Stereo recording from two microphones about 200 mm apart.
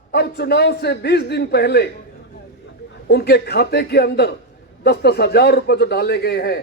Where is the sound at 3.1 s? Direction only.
55° left (ahead or behind).